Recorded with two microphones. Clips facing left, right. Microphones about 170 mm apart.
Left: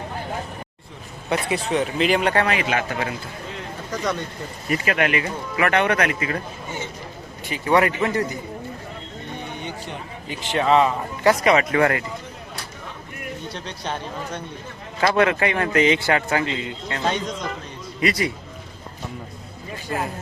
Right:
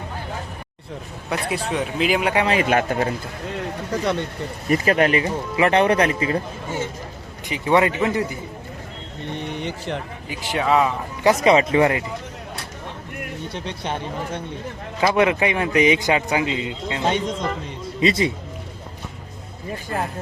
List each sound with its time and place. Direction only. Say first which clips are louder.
1.3 s speech: left 2 dB; centre (ahead or behind)
2.5 s speech: right 4 dB; 45° right (ahead or behind)
3.9 s a man's voice: right 3 dB; 30° right (ahead or behind)
7.4 s a man's voice: right 1 dB; 20° right (ahead or behind)
9.3 s a sound: right 4 dB; 75° right (ahead or behind)
10.2 s a man's voice: left 2 dB; 10° right (ahead or behind)
11.2 s a man's voice: right 2 dB; 20° right (ahead or behind)
13.5 s a man's voice: right 3 dB; 20° right (ahead or behind)